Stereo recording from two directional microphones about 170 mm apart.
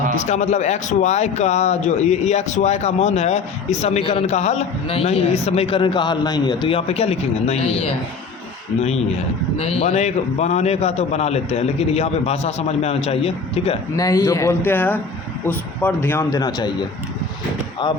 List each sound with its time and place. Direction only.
0.2 s a man's voice: 40° left (ahead or behind)
9.6 s a man's voice: 35° left (ahead or behind)
13.9 s speech: 20° left (ahead or behind)
17.8 s speech: 25° left (ahead or behind)